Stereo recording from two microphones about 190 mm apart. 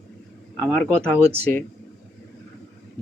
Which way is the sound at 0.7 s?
5° left (ahead or behind).